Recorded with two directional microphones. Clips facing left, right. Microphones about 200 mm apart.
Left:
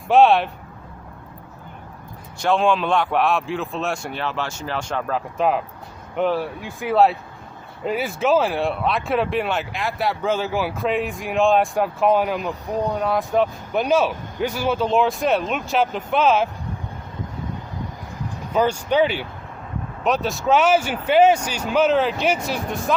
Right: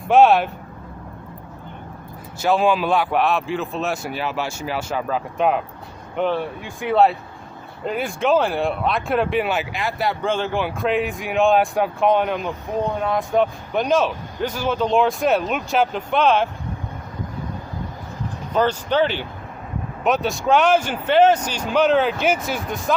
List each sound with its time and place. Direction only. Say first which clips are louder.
0.1 s speech: right 1 dB; centre (ahead or behind)
2.4 s speech: right 1 dB; 5° right (ahead or behind)
18.5 s speech: even; 10° left (ahead or behind)